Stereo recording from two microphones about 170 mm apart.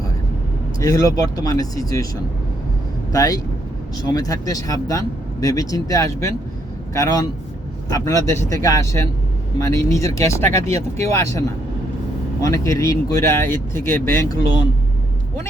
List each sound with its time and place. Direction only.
0.8 s speech: 20° left (ahead or behind)
3.1 s speech: 20° left (ahead or behind)